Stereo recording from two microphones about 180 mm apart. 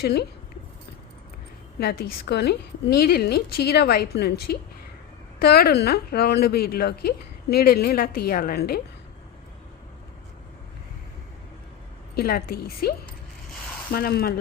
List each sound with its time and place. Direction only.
0.0 s a woman's voice: 65° left (ahead or behind)
1.8 s a woman's voice: 60° left (ahead or behind)
12.1 s a woman's voice: 55° left (ahead or behind)